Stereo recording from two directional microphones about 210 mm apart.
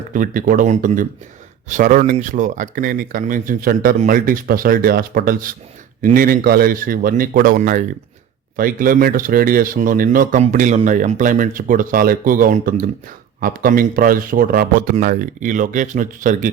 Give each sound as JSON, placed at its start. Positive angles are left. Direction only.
{"t": 0.1, "sound": "speech", "side_deg": -40}